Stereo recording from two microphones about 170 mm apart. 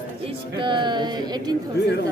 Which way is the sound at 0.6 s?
30° right (ahead or behind).